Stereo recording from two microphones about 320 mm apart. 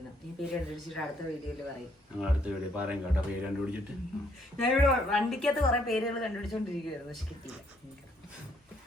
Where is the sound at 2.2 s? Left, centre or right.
Centre.